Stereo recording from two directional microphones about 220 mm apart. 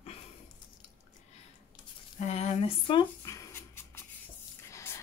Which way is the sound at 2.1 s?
30° left (ahead or behind).